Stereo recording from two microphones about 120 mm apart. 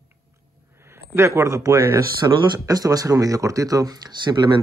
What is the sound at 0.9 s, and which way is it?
Speech, 20° right (ahead or behind).